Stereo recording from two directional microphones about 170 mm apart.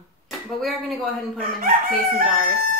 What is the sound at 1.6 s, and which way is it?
Chicken, 55° right (ahead or behind).